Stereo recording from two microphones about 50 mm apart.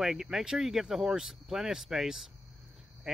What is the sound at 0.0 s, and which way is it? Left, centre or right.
Speech, centre.